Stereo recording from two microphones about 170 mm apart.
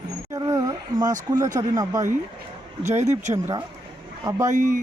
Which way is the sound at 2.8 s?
40° right (ahead or behind).